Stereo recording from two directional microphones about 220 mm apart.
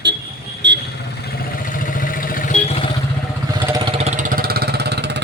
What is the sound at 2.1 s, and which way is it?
Vehicle, 40° left (ahead or behind).